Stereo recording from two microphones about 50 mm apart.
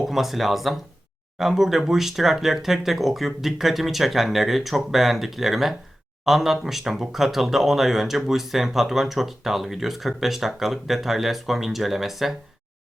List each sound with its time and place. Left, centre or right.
0.0 s speech: centre